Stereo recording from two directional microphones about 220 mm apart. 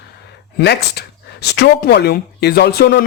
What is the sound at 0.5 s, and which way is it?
Speech, 50° left (ahead or behind).